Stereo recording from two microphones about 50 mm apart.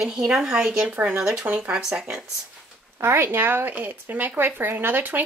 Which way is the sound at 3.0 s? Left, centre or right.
Right.